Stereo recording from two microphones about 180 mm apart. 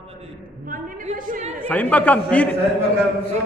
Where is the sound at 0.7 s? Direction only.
50° right (ahead or behind).